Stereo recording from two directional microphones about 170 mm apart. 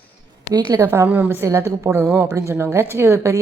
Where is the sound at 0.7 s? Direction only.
15° right (ahead or behind).